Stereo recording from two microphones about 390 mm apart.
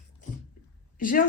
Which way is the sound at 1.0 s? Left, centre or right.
Left.